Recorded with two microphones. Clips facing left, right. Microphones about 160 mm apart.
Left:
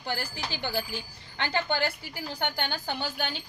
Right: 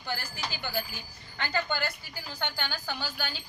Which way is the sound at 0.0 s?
30° left (ahead or behind).